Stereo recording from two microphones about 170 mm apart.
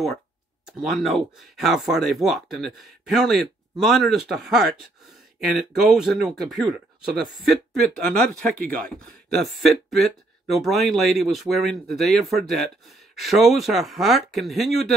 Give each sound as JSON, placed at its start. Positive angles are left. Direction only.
{"t": 0.7, "sound": "speech", "side_deg": 0}